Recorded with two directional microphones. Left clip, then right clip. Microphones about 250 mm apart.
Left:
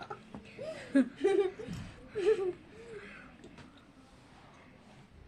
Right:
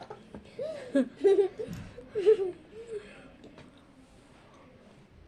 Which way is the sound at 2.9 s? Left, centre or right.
Centre.